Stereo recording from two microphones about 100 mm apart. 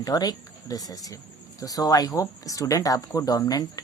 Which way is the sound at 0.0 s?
40° left (ahead or behind).